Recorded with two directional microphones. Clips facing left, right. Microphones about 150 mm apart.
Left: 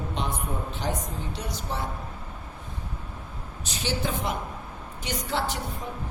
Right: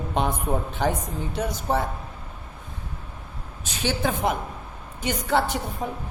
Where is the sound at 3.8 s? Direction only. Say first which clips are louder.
Right 5 dB; 55° right (ahead or behind).